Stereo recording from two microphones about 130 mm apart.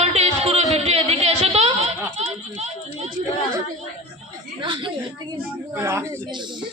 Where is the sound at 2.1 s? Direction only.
55° right (ahead or behind).